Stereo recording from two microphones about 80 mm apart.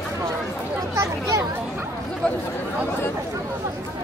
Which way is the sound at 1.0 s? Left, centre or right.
Right.